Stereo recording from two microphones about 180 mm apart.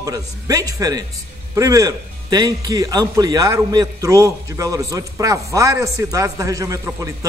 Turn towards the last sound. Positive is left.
turn(degrees=-15)  # may be behind; listen again after turning